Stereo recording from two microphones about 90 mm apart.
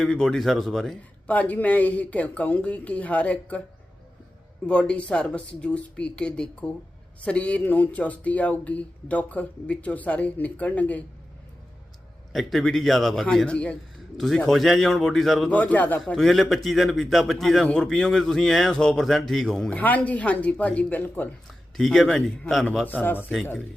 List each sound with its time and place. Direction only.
0.0 s speech: 5° left (ahead or behind)
1.3 s speech: 15° left (ahead or behind)
4.6 s speech: 10° left (ahead or behind)
12.3 s speech: centre (ahead or behind)
15.4 s speech: 15° left (ahead or behind)
16.0 s speech: 5° left (ahead or behind)
19.7 s speech: 15° left (ahead or behind)
21.8 s speech: 5° left (ahead or behind)
22.9 s speech: 20° left (ahead or behind)